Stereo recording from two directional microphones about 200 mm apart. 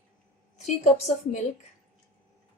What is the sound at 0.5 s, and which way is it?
Speech, 35° left (ahead or behind).